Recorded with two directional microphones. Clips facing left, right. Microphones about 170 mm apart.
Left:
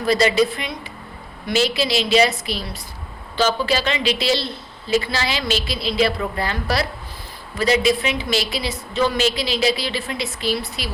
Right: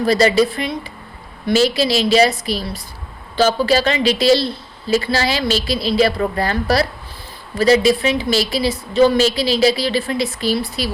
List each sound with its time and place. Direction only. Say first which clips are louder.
0.0 s a woman's voice: right 3 dB; 35° right (ahead or behind)
3.3 s a woman's voice: right 5 dB; 40° right (ahead or behind)